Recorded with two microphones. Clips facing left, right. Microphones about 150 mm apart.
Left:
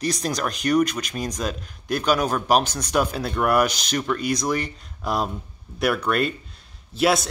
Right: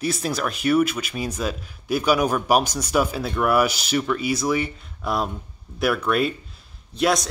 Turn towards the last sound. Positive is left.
turn(degrees=5)  # may be behind; listen again after turning